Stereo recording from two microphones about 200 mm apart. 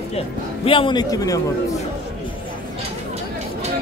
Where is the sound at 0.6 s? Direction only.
25° left (ahead or behind).